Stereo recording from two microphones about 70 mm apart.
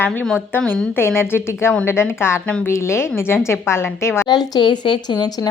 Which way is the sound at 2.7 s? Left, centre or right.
Left.